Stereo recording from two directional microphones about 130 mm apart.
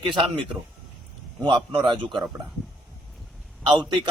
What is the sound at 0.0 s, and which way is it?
Speech, 40° right (ahead or behind).